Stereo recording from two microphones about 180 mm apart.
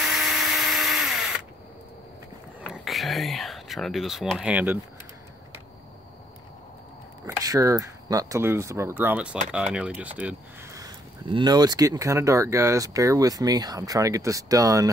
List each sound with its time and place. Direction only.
0.0 s drill: centre (ahead or behind)
2.7 s speech: centre (ahead or behind)
7.4 s speech: 20° right (ahead or behind)
10.8 s speech: 25° right (ahead or behind)